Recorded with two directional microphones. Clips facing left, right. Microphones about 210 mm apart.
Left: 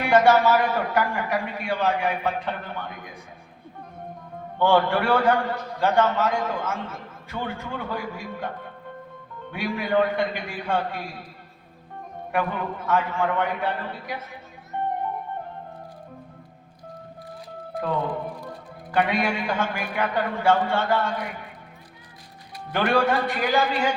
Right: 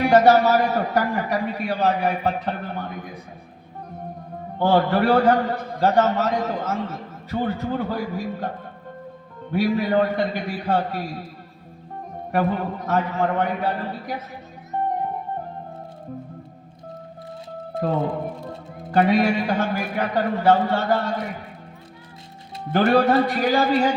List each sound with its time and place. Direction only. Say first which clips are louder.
0.0 s a man's voice: right 3 dB; 40° right (ahead or behind)
4.5 s a man's voice: right 1 dB; 40° right (ahead or behind)
12.3 s a man's voice: right 4 dB; 40° right (ahead or behind)
14.7 s music: right 3 dB; 35° right (ahead or behind)
17.9 s speech: right 3 dB; 25° right (ahead or behind)
18.9 s a man's voice: right 5 dB; 40° right (ahead or behind)
22.7 s a man's voice: right 5 dB; 40° right (ahead or behind)